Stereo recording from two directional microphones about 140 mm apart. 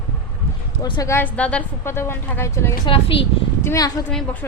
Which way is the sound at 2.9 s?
40° left (ahead or behind).